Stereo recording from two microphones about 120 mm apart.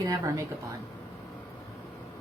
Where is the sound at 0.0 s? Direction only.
30° right (ahead or behind).